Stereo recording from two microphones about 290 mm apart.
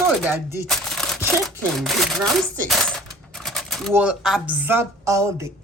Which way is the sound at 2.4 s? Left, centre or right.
Centre.